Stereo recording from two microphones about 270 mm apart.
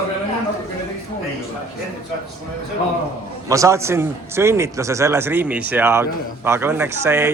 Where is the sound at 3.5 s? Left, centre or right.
Centre.